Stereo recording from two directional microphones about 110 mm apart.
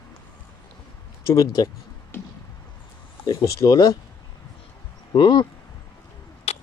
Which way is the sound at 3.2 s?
30° left (ahead or behind).